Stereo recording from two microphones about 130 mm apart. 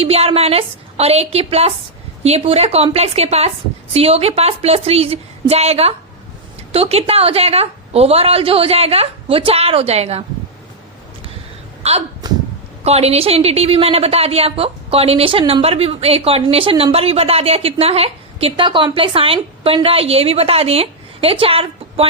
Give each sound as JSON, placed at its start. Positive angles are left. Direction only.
{"t": 0.0, "sound": "a woman's voice", "side_deg": -50}
{"t": 11.8, "sound": "speech", "side_deg": -55}
{"t": 12.2, "sound": "a sound", "side_deg": -30}
{"t": 12.8, "sound": "a woman's voice", "side_deg": -55}